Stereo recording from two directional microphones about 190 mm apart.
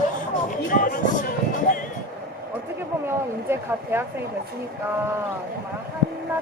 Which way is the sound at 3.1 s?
15° right (ahead or behind).